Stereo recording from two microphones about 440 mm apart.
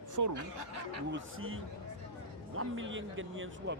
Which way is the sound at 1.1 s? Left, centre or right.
Right.